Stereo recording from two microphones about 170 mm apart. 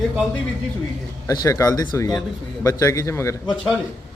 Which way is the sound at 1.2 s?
20° left (ahead or behind).